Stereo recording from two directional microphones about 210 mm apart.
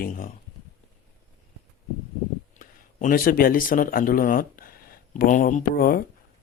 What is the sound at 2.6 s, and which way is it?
Speech, 40° left (ahead or behind).